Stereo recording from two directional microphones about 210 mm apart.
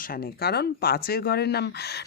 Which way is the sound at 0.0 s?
45° left (ahead or behind).